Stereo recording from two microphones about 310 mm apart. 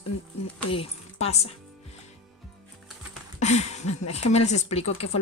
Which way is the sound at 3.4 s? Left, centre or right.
Left.